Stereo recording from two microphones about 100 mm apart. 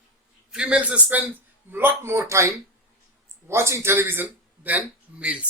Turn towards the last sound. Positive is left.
turn(degrees=-15)  # may be behind; listen again after turning